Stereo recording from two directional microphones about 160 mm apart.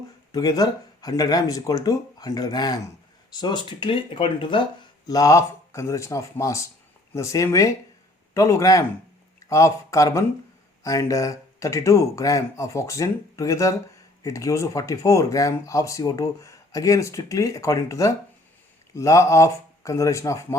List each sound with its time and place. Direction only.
0.3 s speech: 25° left (ahead or behind)